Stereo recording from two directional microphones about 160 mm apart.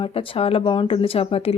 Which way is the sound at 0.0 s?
35° left (ahead or behind).